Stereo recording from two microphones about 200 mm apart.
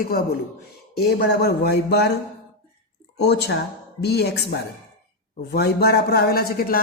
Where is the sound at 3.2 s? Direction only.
55° left (ahead or behind).